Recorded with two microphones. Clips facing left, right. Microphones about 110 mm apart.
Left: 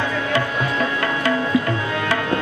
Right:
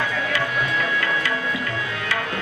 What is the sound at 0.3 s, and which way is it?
Music, 35° left (ahead or behind).